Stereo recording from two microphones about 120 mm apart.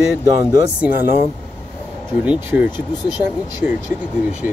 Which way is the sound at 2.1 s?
20° right (ahead or behind).